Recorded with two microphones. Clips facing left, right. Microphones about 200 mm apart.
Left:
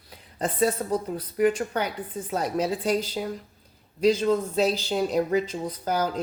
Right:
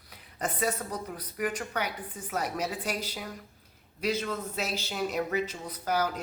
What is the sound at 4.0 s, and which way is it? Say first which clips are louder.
Speech: left 10 dB; 30° left (ahead or behind).